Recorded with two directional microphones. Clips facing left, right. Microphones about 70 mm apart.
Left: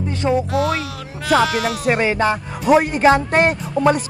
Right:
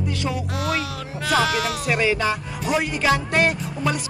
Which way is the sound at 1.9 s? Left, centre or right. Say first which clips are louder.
Left 4 dB; left.